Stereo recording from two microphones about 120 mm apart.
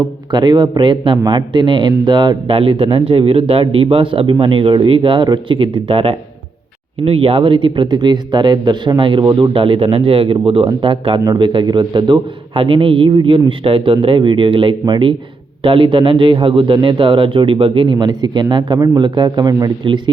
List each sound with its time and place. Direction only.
0.3 s a man's voice: 35° right (ahead or behind)